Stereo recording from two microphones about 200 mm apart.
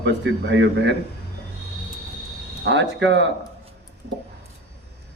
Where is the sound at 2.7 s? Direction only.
65° right (ahead or behind).